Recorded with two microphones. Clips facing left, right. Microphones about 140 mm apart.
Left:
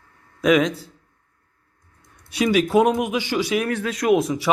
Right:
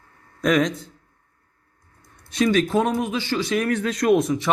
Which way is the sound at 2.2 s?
10° left (ahead or behind).